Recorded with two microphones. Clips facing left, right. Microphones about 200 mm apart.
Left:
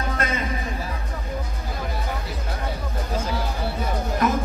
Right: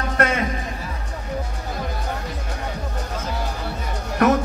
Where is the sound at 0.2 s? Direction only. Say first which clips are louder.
Right 8 dB; 70° right (ahead or behind).